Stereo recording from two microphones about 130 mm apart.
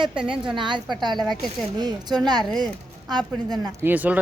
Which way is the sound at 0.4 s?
40° right (ahead or behind).